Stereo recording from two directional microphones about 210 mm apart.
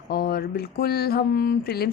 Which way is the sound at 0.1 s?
45° left (ahead or behind).